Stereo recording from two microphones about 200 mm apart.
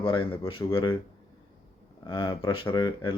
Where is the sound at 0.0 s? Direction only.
25° left (ahead or behind).